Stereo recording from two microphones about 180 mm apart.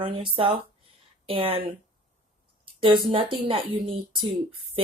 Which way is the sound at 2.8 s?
30° right (ahead or behind).